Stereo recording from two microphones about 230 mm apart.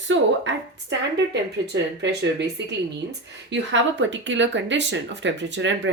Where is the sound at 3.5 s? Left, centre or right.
Right.